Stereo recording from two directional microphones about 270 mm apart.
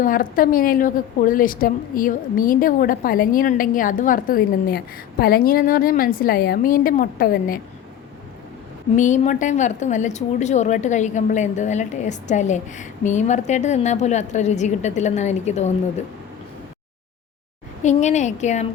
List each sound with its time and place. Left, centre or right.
0.0 s a woman's voice: left
9.0 s a woman's voice: left
17.8 s a woman's voice: left